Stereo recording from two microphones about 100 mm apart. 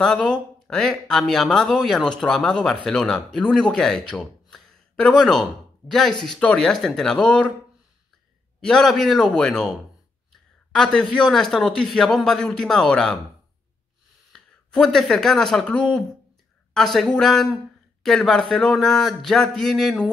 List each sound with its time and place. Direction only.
0.0 s speech: 10° left (ahead or behind)
8.5 s speech: 5° left (ahead or behind)
14.3 s speech: 5° left (ahead or behind)